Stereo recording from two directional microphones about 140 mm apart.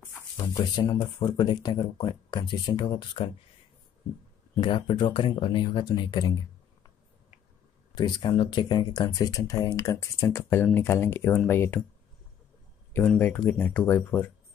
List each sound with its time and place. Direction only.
0.0 s a sound: 25° left (ahead or behind)
1.2 s speech: 30° left (ahead or behind)
4.6 s speech: 35° left (ahead or behind)
7.9 s speech: 30° left (ahead or behind); by 11.8 s 15° left (ahead or behind)
13.2 s speech: 15° left (ahead or behind)